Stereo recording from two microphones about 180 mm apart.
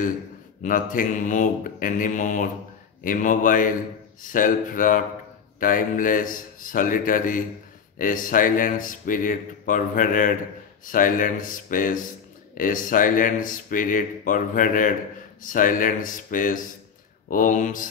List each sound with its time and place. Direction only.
0.6 s speech: 50° left (ahead or behind)